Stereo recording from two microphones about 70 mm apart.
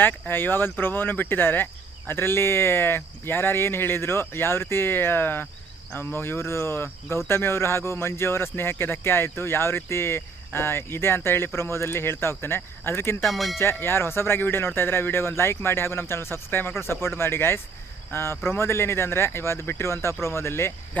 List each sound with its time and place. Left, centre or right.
0.0 s speech: left
13.2 s speech: centre
13.6 s speech: left
20.9 s a sound: left